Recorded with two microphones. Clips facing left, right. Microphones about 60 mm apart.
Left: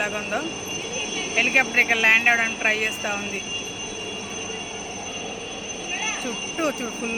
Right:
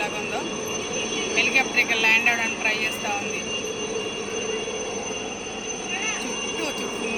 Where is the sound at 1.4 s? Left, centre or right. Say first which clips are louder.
Left 3 dB; left.